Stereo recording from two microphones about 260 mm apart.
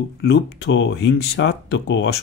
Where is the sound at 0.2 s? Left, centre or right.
Left.